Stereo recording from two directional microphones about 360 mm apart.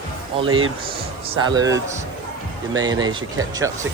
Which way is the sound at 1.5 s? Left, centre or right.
Centre.